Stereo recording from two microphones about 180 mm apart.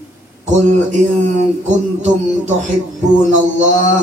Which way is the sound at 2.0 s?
40° right (ahead or behind).